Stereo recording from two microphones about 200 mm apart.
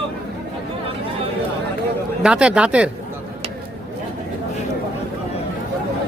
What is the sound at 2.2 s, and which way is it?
Speech, 5° right (ahead or behind).